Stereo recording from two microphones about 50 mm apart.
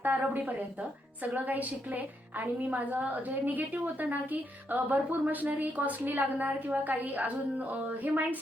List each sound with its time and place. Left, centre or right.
0.0 s a woman's voice: right